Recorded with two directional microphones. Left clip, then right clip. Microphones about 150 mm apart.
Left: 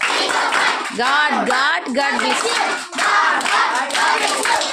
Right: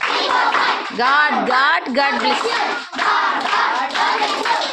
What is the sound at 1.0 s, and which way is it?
Speech, 20° left (ahead or behind).